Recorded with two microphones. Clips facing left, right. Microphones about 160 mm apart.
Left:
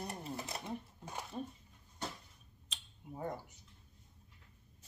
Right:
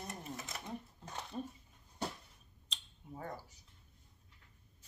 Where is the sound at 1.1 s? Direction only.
10° left (ahead or behind).